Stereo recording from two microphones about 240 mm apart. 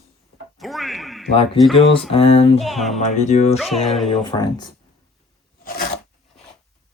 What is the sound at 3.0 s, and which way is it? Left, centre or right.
Speech, left.